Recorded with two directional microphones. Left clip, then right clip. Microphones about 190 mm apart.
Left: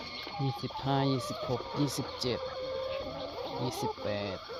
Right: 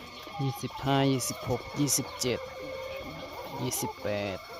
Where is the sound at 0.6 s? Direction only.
20° right (ahead or behind).